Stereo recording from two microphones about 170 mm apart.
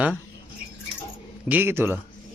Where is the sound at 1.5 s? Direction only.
15° right (ahead or behind).